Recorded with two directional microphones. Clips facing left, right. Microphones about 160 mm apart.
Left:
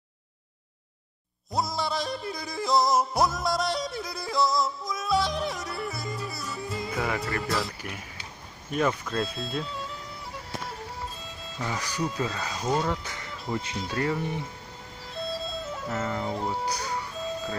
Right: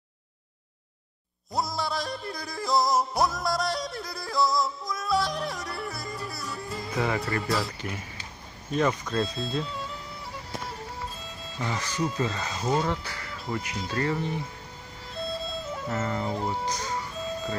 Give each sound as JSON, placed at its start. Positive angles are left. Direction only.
{"t": 1.5, "sound": "yodeling", "side_deg": 0}
{"t": 8.7, "sound": "speech", "side_deg": 0}
{"t": 11.2, "sound": "music", "side_deg": 0}
{"t": 12.0, "sound": "speech", "side_deg": 0}
{"t": 13.0, "sound": "speech", "side_deg": 20}
{"t": 13.7, "sound": "speech", "side_deg": 0}
{"t": 15.1, "sound": "music", "side_deg": 0}
{"t": 16.6, "sound": "speech", "side_deg": 10}